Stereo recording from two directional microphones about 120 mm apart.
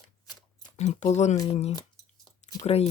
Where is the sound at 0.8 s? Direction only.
75° left (ahead or behind).